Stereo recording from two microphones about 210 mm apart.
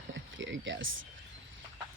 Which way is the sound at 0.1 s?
65° right (ahead or behind).